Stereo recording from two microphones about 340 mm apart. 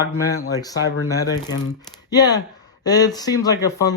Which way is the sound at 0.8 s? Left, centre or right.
Left.